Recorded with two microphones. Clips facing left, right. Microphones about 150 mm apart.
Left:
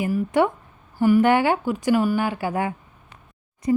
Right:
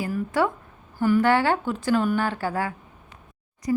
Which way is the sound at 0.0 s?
20° left (ahead or behind).